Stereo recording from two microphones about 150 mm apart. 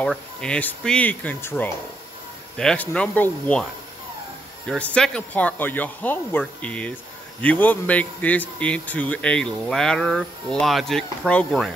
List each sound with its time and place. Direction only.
0.0 s speech: 5° left (ahead or behind)
4.6 s speech: 5° left (ahead or behind)